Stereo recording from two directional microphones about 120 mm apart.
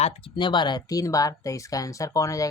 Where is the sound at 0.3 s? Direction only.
40° left (ahead or behind).